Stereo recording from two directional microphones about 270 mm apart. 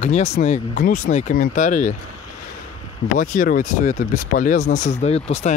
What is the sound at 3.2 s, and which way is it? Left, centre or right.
Speech, left.